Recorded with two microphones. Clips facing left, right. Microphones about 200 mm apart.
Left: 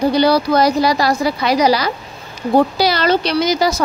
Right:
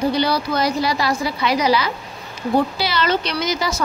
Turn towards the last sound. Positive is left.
turn(degrees=35)  # may be behind; listen again after turning